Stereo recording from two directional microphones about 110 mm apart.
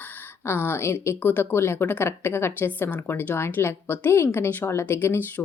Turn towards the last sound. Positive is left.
turn(degrees=20)  # may be behind; listen again after turning